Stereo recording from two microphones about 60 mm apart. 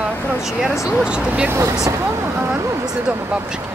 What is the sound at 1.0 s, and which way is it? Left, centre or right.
Speech, centre.